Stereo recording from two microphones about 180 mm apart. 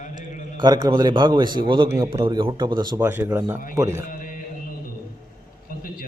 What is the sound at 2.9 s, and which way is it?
Speech, 10° right (ahead or behind).